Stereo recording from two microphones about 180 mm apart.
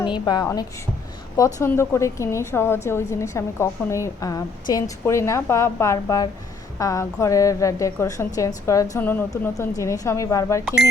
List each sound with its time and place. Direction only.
0.0 s a woman's voice: 25° left (ahead or behind)